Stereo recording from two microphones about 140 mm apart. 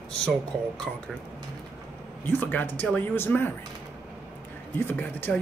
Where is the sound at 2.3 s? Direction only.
15° left (ahead or behind).